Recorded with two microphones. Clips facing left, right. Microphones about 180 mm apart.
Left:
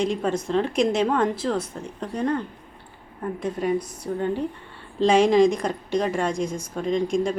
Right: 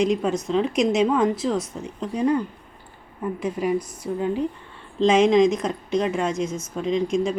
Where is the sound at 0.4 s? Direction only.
5° right (ahead or behind).